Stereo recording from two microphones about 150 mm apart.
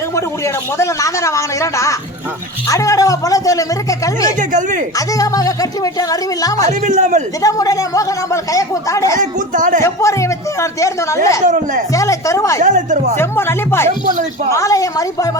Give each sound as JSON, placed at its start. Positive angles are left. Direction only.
{"t": 0.2, "sound": "a man's voice", "side_deg": 20}
{"t": 4.4, "sound": "speech", "side_deg": -55}
{"t": 4.9, "sound": "a man's voice", "side_deg": 25}
{"t": 6.7, "sound": "speech", "side_deg": -50}
{"t": 7.4, "sound": "a man's voice", "side_deg": 25}
{"t": 9.1, "sound": "speech", "side_deg": -55}
{"t": 9.8, "sound": "a man's voice", "side_deg": 20}
{"t": 11.4, "sound": "speech", "side_deg": -55}
{"t": 11.9, "sound": "a man's voice", "side_deg": 20}
{"t": 12.5, "sound": "speech", "side_deg": -55}
{"t": 13.1, "sound": "a man's voice", "side_deg": 15}